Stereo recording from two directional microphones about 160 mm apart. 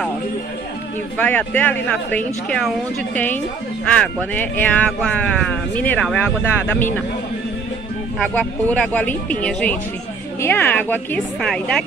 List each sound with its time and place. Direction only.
1.1 s speech: 10° left (ahead or behind)
8.2 s speech: 5° left (ahead or behind)